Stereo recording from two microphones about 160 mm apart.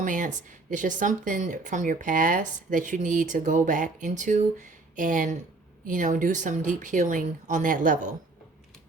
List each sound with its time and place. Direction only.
0.0 s speech: 55° right (ahead or behind)